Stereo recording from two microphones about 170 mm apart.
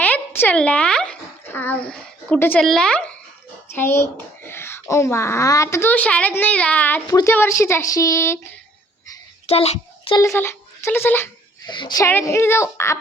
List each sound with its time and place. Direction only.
0.0 s a child's voice: 10° left (ahead or behind)
9.5 s a child's voice: 35° left (ahead or behind)
10.3 s speech: 15° left (ahead or behind)
11.6 s speech: 25° left (ahead or behind)
12.0 s speech: 15° left (ahead or behind)